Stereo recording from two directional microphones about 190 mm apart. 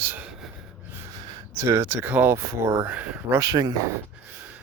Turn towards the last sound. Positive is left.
turn(degrees=-20)  # may be behind; listen again after turning